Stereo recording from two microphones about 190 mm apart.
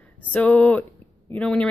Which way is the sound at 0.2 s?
10° left (ahead or behind).